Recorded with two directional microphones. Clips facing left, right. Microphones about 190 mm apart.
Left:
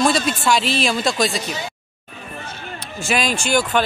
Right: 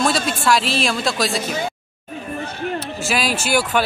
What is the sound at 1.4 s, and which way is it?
Speech, 50° right (ahead or behind).